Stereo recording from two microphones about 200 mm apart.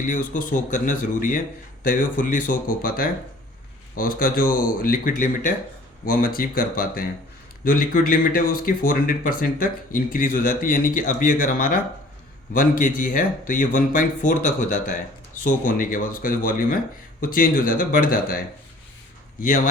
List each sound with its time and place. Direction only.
0.3 s speech: 40° left (ahead or behind)
13.0 s speech: 40° left (ahead or behind)